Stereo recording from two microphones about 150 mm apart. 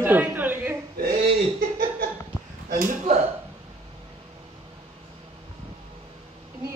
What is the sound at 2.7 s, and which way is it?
Speech, 65° right (ahead or behind).